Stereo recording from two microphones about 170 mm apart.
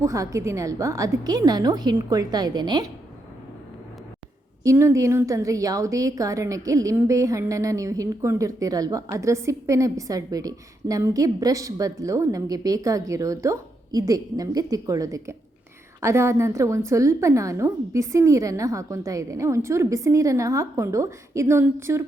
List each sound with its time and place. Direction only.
0.0 s a woman's voice: 20° right (ahead or behind)
4.6 s a woman's voice: 15° right (ahead or behind)